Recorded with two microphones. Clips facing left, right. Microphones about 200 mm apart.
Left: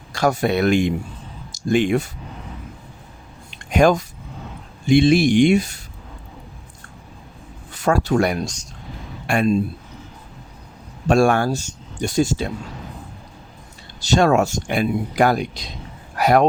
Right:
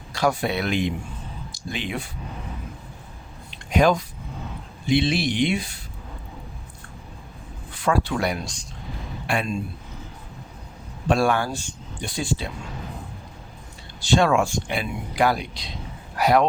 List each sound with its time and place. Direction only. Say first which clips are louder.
0.1 s speech: left 4 dB; 45° left (ahead or behind)
3.7 s speech: left 4 dB; 50° left (ahead or behind)
7.7 s speech: left 5 dB; 45° left (ahead or behind)
11.1 s speech: left 5 dB; 45° left (ahead or behind)
14.0 s speech: left 3 dB; 40° left (ahead or behind)